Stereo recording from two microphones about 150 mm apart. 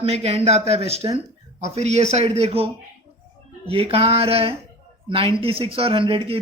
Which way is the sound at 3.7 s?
40° right (ahead or behind).